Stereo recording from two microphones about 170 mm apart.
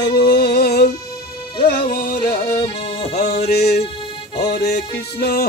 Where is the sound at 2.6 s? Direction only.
35° left (ahead or behind).